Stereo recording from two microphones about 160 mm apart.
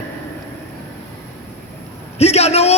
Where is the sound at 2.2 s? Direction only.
40° left (ahead or behind).